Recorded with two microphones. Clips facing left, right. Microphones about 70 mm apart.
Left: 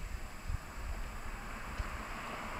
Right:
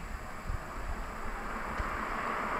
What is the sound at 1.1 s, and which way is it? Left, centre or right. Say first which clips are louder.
Vehicle: right 9 dB; right.